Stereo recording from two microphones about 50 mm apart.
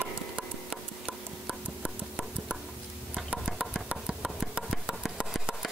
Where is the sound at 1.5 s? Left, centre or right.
Right.